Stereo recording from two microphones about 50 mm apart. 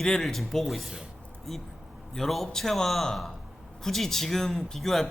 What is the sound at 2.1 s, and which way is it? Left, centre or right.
A man's voice, centre.